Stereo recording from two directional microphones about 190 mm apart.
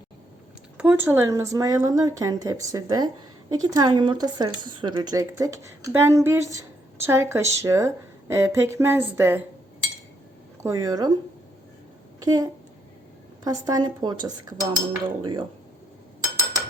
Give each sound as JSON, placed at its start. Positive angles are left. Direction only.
{"t": 0.8, "sound": "a woman's voice", "side_deg": -10}
{"t": 10.6, "sound": "a woman's voice", "side_deg": -15}
{"t": 12.2, "sound": "speech", "side_deg": -20}